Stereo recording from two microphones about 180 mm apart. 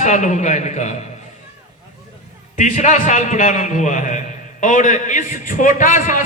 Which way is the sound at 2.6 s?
45° left (ahead or behind).